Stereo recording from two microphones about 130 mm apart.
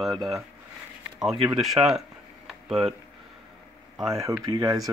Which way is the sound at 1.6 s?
5° right (ahead or behind).